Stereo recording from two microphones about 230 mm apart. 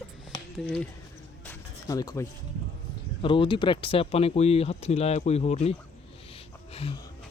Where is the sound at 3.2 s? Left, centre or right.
Left.